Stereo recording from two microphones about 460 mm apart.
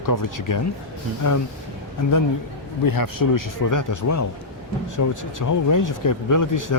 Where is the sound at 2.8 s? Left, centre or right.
Left.